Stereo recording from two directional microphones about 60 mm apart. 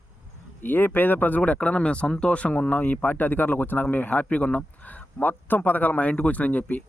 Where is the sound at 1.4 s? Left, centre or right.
Centre.